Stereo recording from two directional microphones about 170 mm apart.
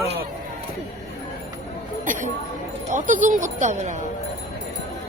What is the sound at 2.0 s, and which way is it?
Speech, 50° right (ahead or behind).